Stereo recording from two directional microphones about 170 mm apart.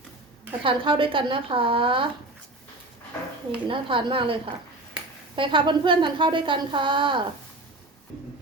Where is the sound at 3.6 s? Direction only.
30° right (ahead or behind).